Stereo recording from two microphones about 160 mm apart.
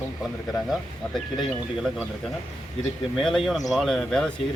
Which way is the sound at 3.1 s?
Centre (ahead or behind).